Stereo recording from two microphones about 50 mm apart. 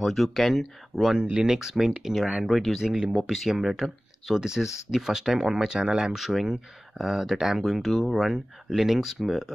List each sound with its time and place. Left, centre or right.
0.0 s speech: centre
1.3 s speech: centre
1.7 s speech: centre
3.0 s speech: centre
3.3 s speech: centre
6.1 s speech: centre
6.4 s speech: centre